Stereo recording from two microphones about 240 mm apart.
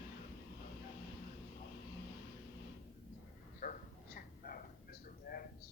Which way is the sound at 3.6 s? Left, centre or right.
Left.